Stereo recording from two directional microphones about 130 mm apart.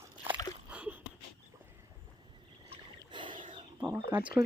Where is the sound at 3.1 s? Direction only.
35° right (ahead or behind).